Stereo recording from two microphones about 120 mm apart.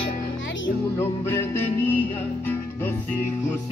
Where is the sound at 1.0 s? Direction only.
20° left (ahead or behind).